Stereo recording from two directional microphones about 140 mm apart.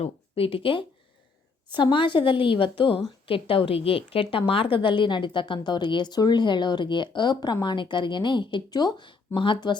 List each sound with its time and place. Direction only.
0.0 s speech: 40° left (ahead or behind)